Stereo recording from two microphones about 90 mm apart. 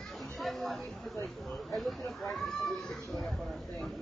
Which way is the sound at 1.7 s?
Centre (ahead or behind).